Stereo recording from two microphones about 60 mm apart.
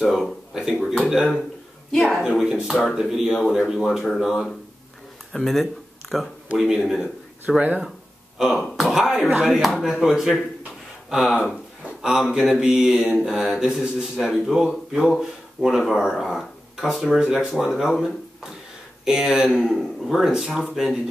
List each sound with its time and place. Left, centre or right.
0.0 s speech: centre
2.2 s speech: centre
5.3 s speech: centre
19.5 s speech: centre